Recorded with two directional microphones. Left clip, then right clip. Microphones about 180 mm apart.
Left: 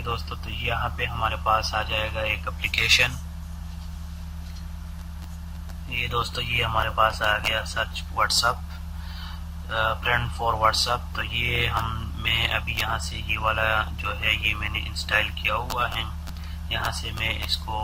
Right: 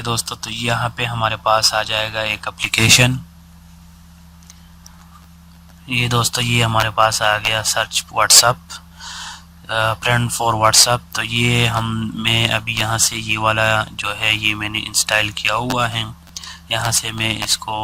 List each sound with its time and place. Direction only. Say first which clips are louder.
0.0 s speech: right 8 dB; 55° right (ahead or behind)
5.9 s speech: right 8 dB; 55° right (ahead or behind)